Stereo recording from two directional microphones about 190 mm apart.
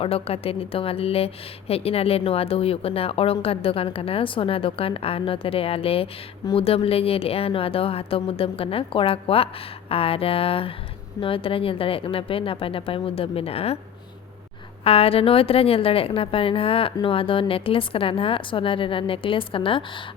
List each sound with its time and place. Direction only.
0.0 s speech: 30° left (ahead or behind)
14.8 s speech: 30° left (ahead or behind)